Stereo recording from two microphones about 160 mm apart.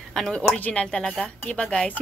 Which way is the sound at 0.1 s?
5° left (ahead or behind).